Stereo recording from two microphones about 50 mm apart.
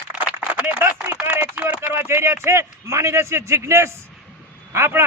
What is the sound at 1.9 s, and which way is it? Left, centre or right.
Speech, right.